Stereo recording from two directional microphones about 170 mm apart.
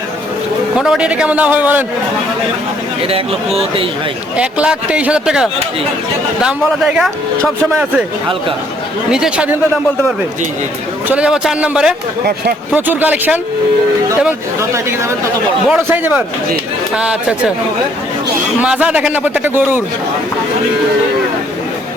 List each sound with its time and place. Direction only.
0.8 s a man's voice: 5° right (ahead or behind)
3.0 s speech: 35° right (ahead or behind)
4.4 s a man's voice: 5° right (ahead or behind)
9.0 s speech: 5° right (ahead or behind)
11.1 s a man's voice: 5° right (ahead or behind)
18.6 s a man's voice: 5° right (ahead or behind)